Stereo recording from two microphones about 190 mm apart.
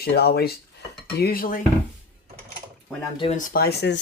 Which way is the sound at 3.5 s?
55° left (ahead or behind).